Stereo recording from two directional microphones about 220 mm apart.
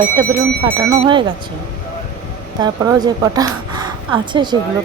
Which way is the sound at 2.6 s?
15° right (ahead or behind).